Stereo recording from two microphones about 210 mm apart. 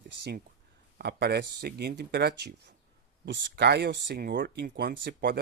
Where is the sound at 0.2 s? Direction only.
50° right (ahead or behind).